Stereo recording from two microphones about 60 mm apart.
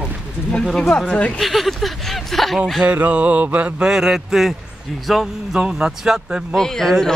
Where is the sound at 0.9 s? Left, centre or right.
Centre.